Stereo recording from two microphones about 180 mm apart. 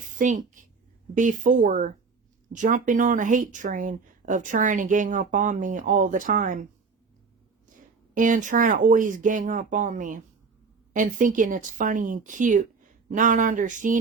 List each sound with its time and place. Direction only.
0.2 s speech: 45° right (ahead or behind)
8.1 s speech: 45° right (ahead or behind)